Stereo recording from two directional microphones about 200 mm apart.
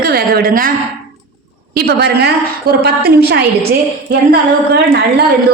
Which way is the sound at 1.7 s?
50° right (ahead or behind).